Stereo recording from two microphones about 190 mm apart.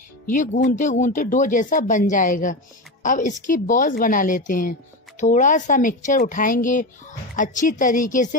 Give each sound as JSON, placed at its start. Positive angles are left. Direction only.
{"t": 0.3, "sound": "speech", "side_deg": 45}